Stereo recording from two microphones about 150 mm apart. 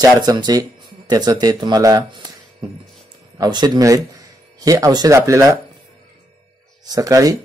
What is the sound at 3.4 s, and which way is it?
Speech, 25° right (ahead or behind).